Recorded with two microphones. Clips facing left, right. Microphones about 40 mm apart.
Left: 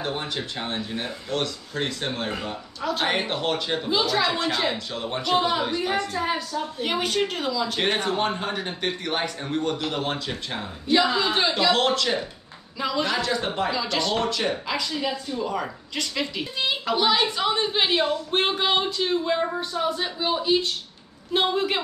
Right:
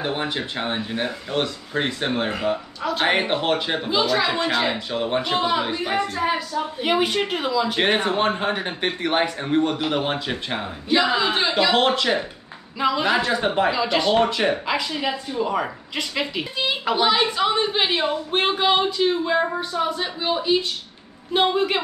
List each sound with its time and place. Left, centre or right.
0.0 s speech: right
2.8 s a woman's voice: centre
3.1 s speech: right
3.9 s a woman's voice: centre
16.5 s a woman's voice: centre